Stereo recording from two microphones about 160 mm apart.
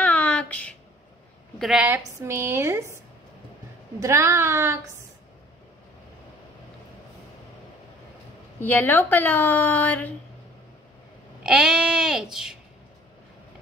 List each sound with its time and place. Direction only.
0.0 s a sound: 10° left (ahead or behind)
1.6 s a woman's voice: 5° right (ahead or behind)
4.0 s a woman's voice: 15° right (ahead or behind)
8.5 s speech: 10° left (ahead or behind)
11.4 s speech: 5° right (ahead or behind)